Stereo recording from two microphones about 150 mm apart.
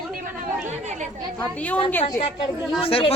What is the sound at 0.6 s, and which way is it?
Speech, 55° right (ahead or behind).